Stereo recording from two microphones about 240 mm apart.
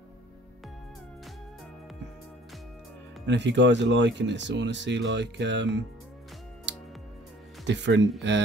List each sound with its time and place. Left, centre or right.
3.3 s speech: right
7.6 s speech: right